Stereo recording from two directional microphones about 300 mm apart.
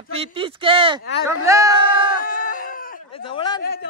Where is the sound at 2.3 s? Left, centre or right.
Left.